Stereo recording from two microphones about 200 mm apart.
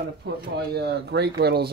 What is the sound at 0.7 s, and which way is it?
Speech, 55° right (ahead or behind).